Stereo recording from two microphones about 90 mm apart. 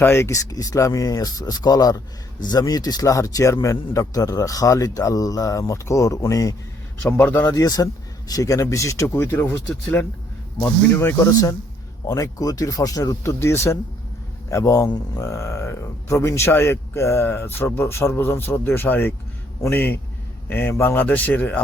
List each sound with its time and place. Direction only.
0.0 s speech: 30° left (ahead or behind)
9.6 s a man's voice: 15° left (ahead or behind)